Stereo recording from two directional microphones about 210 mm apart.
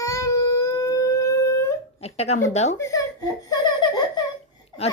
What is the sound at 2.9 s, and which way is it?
Giggle, 15° left (ahead or behind).